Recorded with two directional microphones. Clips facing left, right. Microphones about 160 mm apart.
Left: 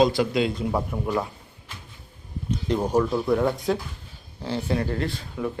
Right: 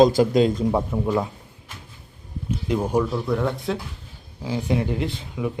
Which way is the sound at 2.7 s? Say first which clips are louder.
Right 1 dB; 10° right (ahead or behind).